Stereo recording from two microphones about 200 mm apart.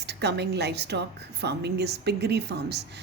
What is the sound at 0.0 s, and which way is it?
A woman's voice, 55° right (ahead or behind).